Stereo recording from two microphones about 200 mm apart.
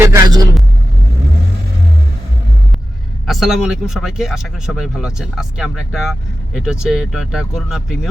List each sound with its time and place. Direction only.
0.0 s vehicle: 15° right (ahead or behind)
3.2 s speech: centre (ahead or behind)